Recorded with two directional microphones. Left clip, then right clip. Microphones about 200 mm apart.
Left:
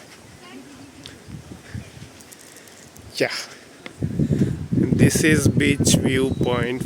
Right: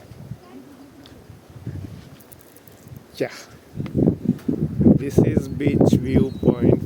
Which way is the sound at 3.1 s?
5° right (ahead or behind).